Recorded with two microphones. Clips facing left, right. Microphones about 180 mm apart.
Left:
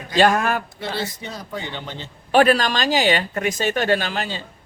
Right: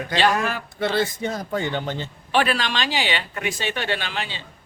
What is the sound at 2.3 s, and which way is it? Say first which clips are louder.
Speech: left 6 dB; 45° left (ahead or behind).